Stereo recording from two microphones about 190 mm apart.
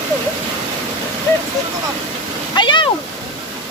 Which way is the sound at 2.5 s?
25° left (ahead or behind).